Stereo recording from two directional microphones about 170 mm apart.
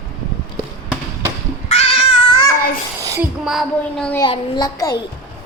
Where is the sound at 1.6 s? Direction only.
35° left (ahead or behind).